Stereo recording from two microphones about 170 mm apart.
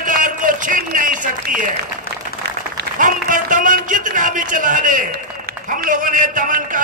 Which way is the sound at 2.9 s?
50° right (ahead or behind).